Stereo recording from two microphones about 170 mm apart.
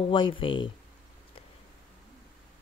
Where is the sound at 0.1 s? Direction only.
30° left (ahead or behind).